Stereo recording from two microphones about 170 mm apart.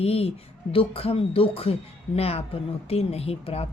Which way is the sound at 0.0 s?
35° left (ahead or behind).